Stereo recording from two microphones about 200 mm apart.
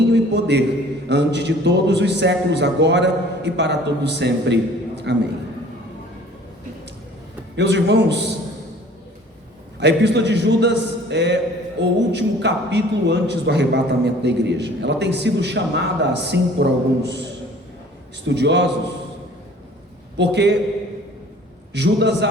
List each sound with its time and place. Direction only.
0.1 s a sound: 60° right (ahead or behind)
1.0 s a man's voice: 60° right (ahead or behind)
7.5 s a man's voice: 60° right (ahead or behind)
9.8 s a man's voice: 60° right (ahead or behind)
18.3 s a man's voice: 60° right (ahead or behind)
20.1 s a man's voice: 60° right (ahead or behind)
21.7 s a man's voice: 60° right (ahead or behind)